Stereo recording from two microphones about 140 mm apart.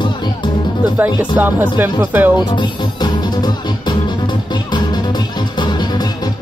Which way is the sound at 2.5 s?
30° left (ahead or behind).